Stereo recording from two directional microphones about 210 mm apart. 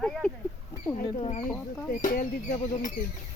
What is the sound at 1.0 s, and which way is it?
Speech, 25° left (ahead or behind).